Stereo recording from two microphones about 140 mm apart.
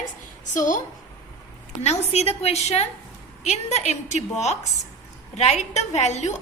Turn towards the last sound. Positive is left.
turn(degrees=55)  # may be behind; listen again after turning